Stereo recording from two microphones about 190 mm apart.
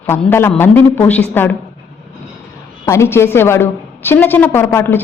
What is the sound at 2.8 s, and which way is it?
A woman's voice, 15° left (ahead or behind).